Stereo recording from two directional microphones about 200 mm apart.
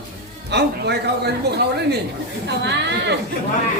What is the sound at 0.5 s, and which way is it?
A woman's voice, 55° right (ahead or behind).